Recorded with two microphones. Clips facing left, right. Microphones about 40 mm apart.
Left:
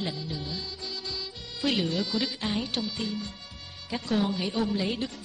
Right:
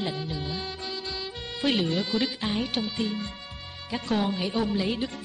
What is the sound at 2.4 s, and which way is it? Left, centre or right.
Speech, centre.